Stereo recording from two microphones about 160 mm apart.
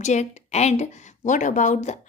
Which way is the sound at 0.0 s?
45° left (ahead or behind).